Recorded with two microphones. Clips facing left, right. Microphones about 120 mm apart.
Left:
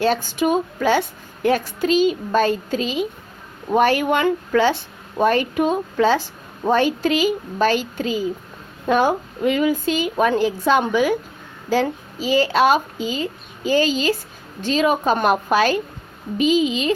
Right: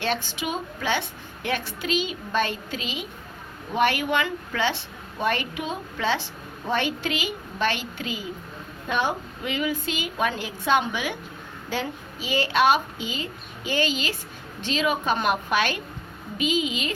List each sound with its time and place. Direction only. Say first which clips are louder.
0.0 s a woman's voice: left 9 dB; 40° left (ahead or behind)